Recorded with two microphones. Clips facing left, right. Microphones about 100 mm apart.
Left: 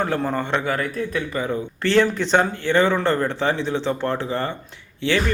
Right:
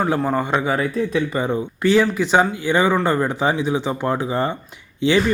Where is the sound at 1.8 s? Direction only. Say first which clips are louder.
Right 2 dB; 5° right (ahead or behind).